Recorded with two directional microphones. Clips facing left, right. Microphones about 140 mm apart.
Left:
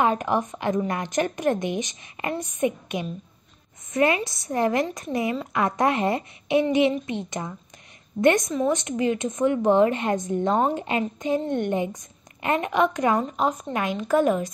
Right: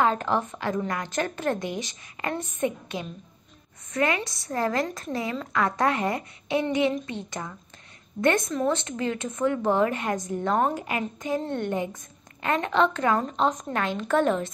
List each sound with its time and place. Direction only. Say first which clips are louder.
0.0 s a woman's voice: left 1 dB; 15° left (ahead or behind)